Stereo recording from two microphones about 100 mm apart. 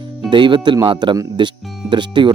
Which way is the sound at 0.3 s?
50° right (ahead or behind).